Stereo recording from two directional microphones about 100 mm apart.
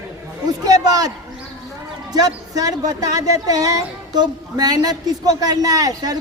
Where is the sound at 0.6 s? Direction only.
40° right (ahead or behind).